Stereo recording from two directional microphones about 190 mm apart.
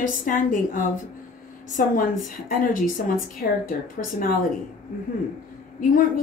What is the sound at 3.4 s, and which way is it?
Speech, 55° left (ahead or behind).